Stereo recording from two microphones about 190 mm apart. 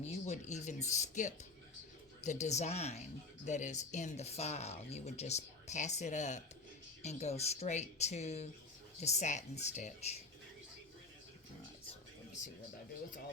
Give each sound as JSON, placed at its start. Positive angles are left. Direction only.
{"t": 0.0, "sound": "speech", "side_deg": 35}